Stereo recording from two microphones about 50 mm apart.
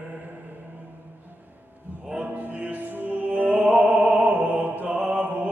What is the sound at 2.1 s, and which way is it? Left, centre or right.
Music, right.